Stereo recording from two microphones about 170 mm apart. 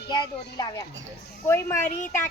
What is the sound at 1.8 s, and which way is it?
Speech, 50° left (ahead or behind).